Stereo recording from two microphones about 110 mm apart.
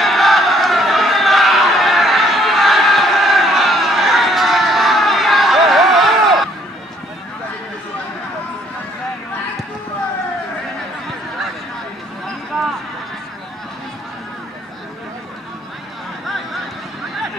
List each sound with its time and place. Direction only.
0.0 s crowd: centre (ahead or behind)